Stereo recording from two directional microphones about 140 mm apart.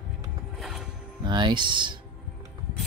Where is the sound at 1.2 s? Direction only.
35° right (ahead or behind).